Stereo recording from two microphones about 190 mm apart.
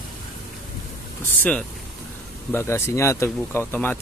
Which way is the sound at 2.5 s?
15° left (ahead or behind).